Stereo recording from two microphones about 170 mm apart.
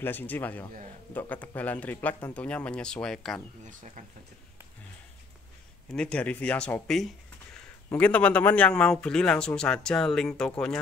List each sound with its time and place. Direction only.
0.0 s speech: 10° left (ahead or behind)
3.6 s speech: 45° right (ahead or behind)
5.9 s a man's voice: 5° left (ahead or behind)